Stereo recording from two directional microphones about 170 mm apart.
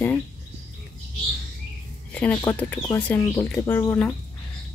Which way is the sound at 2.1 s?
10° left (ahead or behind).